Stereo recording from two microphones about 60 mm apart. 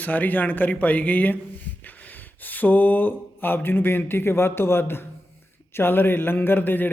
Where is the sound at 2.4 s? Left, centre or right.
Left.